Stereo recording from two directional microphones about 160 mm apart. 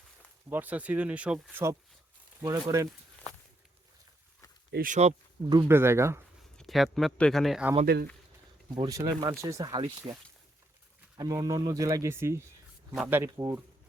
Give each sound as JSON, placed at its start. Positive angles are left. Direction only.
{"t": 0.5, "sound": "speech", "side_deg": -10}
{"t": 4.7, "sound": "speech", "side_deg": -60}
{"t": 5.5, "sound": "speech", "side_deg": -20}
{"t": 6.6, "sound": "speech", "side_deg": 0}
{"t": 8.7, "sound": "speech", "side_deg": -20}
{"t": 10.0, "sound": "speech", "side_deg": -35}
{"t": 11.2, "sound": "speech", "side_deg": -25}